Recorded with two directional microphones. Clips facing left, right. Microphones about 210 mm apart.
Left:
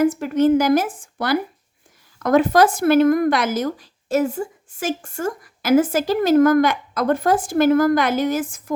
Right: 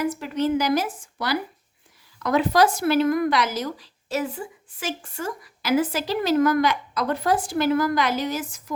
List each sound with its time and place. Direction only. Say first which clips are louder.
0.0 s speech: left 7 dB; 50° left (ahead or behind)